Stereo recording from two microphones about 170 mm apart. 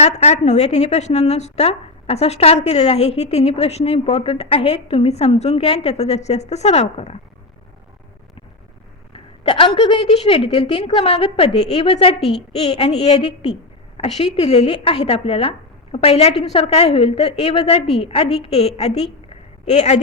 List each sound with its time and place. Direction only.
0.0 s a woman's voice: 40° left (ahead or behind)
9.1 s a woman's voice: 30° left (ahead or behind)